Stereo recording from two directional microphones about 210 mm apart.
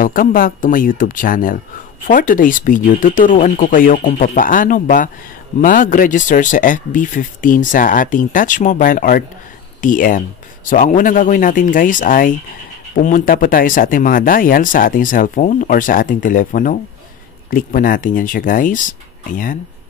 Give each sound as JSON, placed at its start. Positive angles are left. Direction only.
{"t": 0.0, "sound": "speech", "side_deg": 40}